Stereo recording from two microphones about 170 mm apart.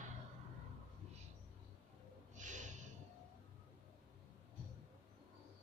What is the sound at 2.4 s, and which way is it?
Gasp, 45° right (ahead or behind).